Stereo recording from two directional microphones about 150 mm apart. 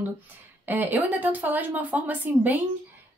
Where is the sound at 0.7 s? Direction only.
10° right (ahead or behind).